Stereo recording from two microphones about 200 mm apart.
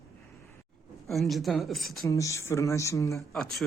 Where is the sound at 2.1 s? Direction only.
15° left (ahead or behind).